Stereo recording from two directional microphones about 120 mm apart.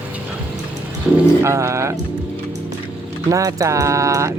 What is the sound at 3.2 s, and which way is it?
Speech, 30° right (ahead or behind).